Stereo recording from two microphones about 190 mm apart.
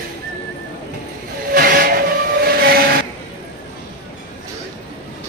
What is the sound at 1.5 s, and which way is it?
Steam whistle, 50° right (ahead or behind).